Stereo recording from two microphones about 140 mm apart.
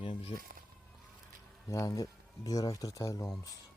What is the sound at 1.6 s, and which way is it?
Speech, 25° left (ahead or behind).